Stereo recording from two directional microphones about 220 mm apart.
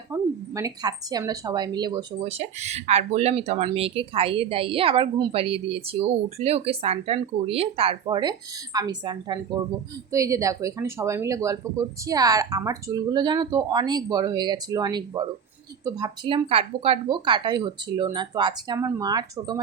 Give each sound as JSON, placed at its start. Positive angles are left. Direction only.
{"t": 0.1, "sound": "speech", "side_deg": -15}